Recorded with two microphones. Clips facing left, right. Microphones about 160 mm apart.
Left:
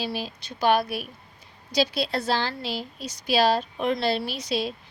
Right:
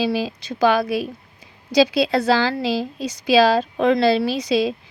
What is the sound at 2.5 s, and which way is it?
A woman's voice, 90° right.